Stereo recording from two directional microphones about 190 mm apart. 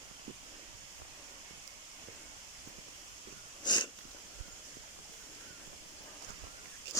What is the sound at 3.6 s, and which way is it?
Snort, 25° left (ahead or behind).